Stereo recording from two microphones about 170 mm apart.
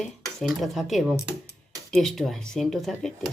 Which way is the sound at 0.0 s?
Centre (ahead or behind).